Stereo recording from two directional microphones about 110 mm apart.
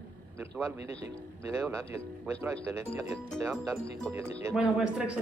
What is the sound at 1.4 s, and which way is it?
Speech, 25° right (ahead or behind).